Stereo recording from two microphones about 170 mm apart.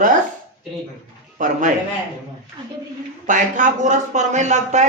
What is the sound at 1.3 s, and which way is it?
Speech, 50° right (ahead or behind).